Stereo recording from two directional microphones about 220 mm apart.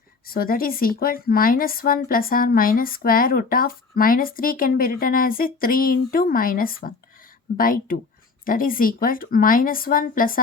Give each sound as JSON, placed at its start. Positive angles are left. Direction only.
{"t": 0.3, "sound": "a woman's voice", "side_deg": 40}